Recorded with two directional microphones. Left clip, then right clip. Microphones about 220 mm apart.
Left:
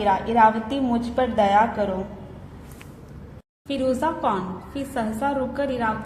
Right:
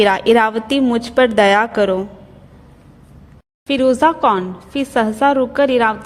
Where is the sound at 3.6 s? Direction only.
40° right (ahead or behind).